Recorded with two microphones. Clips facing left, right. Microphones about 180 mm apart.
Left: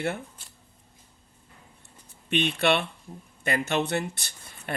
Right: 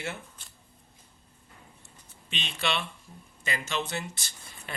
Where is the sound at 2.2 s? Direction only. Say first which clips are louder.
Left 9 dB; 60° left (ahead or behind).